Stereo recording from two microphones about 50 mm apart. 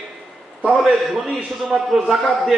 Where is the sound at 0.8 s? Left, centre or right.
Centre.